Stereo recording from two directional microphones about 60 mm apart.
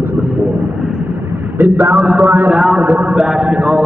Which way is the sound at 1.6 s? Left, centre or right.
Right.